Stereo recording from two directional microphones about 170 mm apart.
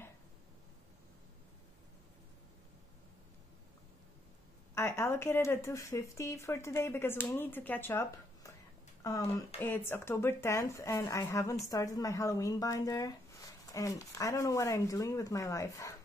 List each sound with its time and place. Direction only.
4.7 s speech: 15° left (ahead or behind)